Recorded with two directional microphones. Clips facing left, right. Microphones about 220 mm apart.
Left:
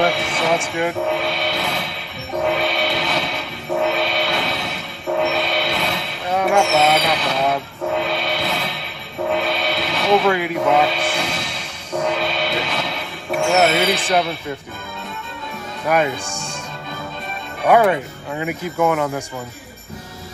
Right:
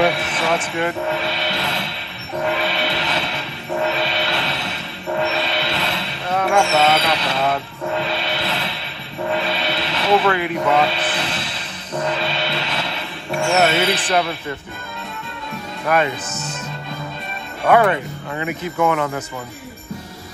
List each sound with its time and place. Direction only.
0.0 s a sound: centre (ahead or behind)
0.7 s music: centre (ahead or behind)
11.5 s music: 10° left (ahead or behind)
12.2 s music: centre (ahead or behind)
15.9 s speech: 10° left (ahead or behind)
17.6 s speech: 5° left (ahead or behind)